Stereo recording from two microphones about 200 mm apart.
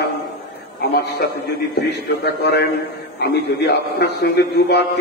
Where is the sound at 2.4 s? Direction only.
55° left (ahead or behind).